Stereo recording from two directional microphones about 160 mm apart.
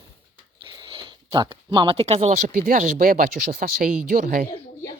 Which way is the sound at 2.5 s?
60° right (ahead or behind).